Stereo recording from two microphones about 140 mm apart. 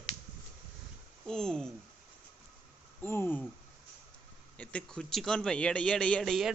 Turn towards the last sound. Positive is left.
turn(degrees=0)  # may be behind; listen again after turning